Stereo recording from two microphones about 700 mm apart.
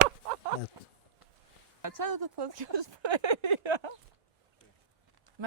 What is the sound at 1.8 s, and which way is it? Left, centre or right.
Speech, right.